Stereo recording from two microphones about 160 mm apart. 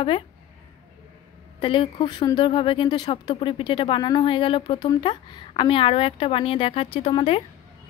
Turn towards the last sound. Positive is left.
turn(degrees=35)  # may be behind; listen again after turning